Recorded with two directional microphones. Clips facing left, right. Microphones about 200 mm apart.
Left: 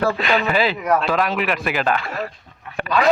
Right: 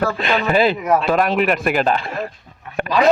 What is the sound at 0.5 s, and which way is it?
Speech, 50° right (ahead or behind).